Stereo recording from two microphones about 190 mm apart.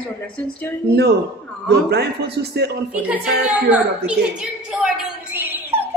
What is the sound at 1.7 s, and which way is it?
A man's voice, 60° right (ahead or behind).